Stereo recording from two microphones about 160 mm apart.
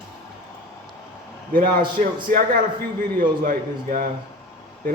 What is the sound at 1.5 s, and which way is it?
A man's voice, 60° right (ahead or behind).